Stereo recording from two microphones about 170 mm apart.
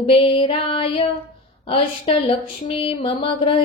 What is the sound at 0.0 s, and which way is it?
Female singing, 35° left (ahead or behind).